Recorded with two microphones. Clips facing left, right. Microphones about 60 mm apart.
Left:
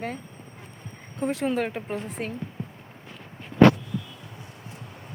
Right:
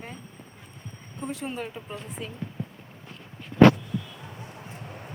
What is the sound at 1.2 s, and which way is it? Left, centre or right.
A woman's voice, left.